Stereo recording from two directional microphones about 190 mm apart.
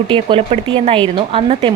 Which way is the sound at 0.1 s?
30° right (ahead or behind).